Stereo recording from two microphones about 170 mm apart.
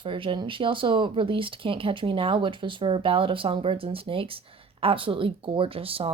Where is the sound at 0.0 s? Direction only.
30° right (ahead or behind).